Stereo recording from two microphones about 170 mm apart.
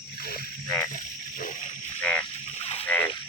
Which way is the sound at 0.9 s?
50° left (ahead or behind).